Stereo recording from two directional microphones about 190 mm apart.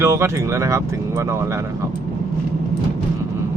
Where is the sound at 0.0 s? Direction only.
15° right (ahead or behind).